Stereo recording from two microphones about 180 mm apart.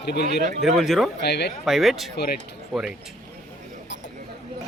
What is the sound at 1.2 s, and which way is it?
Speech, 65° left (ahead or behind).